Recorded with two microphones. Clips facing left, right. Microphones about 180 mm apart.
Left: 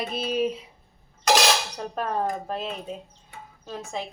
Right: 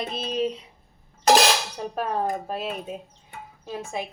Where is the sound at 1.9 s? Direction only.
5° right (ahead or behind).